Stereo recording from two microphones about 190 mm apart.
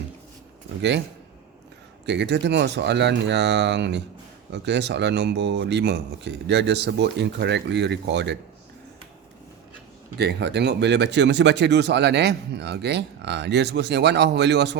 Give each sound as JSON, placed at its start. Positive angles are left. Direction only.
{"t": 0.8, "sound": "speech", "side_deg": -65}
{"t": 2.0, "sound": "speech", "side_deg": -65}
{"t": 10.2, "sound": "speech", "side_deg": -60}